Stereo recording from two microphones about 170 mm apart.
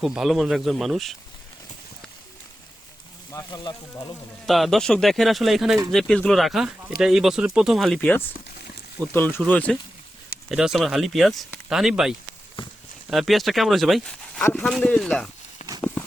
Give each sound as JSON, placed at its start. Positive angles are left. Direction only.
{"t": 0.0, "sound": "speech", "side_deg": 0}
{"t": 3.3, "sound": "speech", "side_deg": 25}
{"t": 4.4, "sound": "speech", "side_deg": 0}
{"t": 10.5, "sound": "speech", "side_deg": -5}
{"t": 12.6, "sound": "a sound", "side_deg": 30}
{"t": 13.1, "sound": "speech", "side_deg": 0}